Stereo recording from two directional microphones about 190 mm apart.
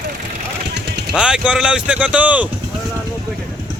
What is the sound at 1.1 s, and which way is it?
Speech, 5° right (ahead or behind).